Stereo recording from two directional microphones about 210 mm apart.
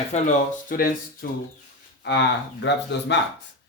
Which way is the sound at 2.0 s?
55° left (ahead or behind).